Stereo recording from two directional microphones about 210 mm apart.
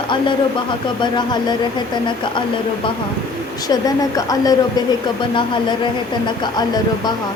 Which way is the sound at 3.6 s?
15° left (ahead or behind).